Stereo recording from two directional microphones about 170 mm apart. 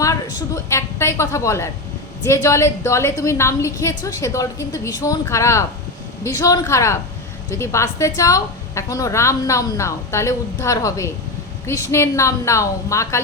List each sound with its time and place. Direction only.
0.0 s a woman's voice: 20° left (ahead or behind)